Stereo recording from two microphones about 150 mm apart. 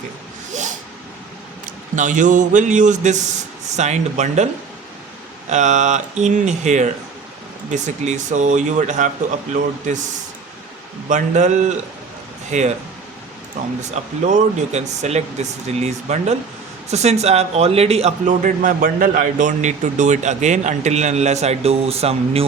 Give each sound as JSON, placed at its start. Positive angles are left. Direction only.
{"t": 0.5, "sound": "a sound", "side_deg": -55}
{"t": 1.6, "sound": "a man's voice", "side_deg": -55}
{"t": 5.5, "sound": "a man's voice", "side_deg": -55}
{"t": 11.1, "sound": "a man's voice", "side_deg": -55}